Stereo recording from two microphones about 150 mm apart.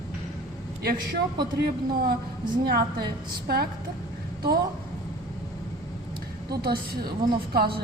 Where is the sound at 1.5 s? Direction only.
85° right.